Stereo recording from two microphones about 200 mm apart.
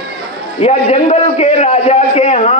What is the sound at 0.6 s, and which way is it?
A man's voice, 30° left (ahead or behind).